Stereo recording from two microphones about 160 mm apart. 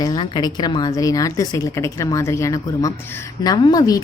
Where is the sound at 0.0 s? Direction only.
25° left (ahead or behind).